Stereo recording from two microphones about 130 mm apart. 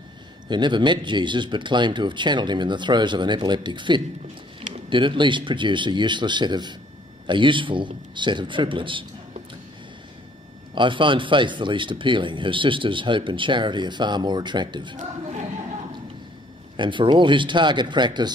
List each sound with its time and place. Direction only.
0.5 s speech: 35° right (ahead or behind)
10.7 s speech: 40° right (ahead or behind)
16.7 s speech: 40° right (ahead or behind)